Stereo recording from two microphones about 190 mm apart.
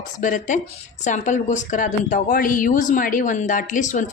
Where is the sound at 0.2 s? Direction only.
40° left (ahead or behind).